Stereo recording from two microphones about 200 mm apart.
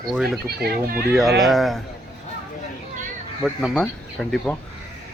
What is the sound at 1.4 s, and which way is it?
Speech, centre (ahead or behind).